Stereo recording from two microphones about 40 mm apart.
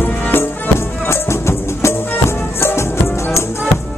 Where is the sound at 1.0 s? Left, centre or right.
Left.